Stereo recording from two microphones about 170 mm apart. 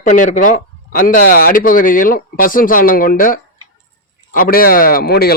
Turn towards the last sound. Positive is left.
turn(degrees=65)  # may be behind; listen again after turning